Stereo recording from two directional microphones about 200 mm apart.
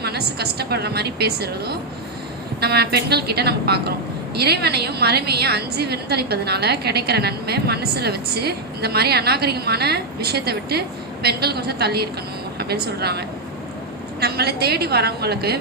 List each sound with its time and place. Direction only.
0.0 s a woman's voice: 55° right (ahead or behind)